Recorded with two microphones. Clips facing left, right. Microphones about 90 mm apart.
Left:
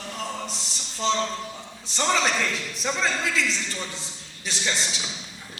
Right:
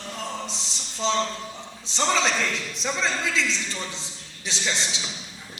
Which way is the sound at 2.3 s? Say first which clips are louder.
Even; 15° left (ahead or behind).